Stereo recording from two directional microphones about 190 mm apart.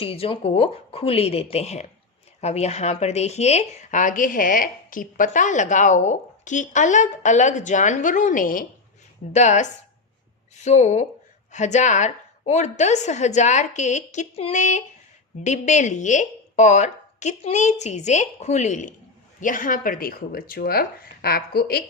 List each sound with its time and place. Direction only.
0.0 s speech: 30° left (ahead or behind); by 21.8 s 55° left (ahead or behind)